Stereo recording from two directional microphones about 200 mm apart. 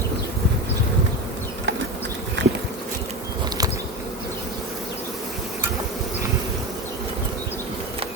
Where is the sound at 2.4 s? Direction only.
60° right (ahead or behind).